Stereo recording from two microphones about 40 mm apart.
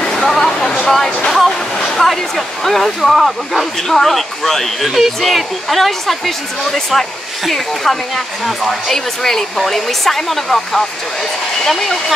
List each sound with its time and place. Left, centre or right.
0.2 s a sound: centre
0.8 s speech: centre
4.8 s speech: centre